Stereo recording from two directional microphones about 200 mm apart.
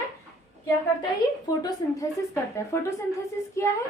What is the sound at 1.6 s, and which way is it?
A woman's voice, 15° left (ahead or behind).